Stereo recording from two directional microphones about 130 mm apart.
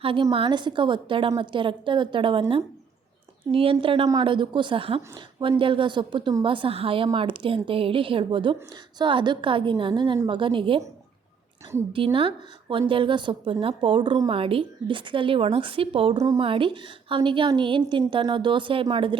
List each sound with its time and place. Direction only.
0.0 s a woman's voice: 45° right (ahead or behind)
11.9 s a woman's voice: 40° right (ahead or behind)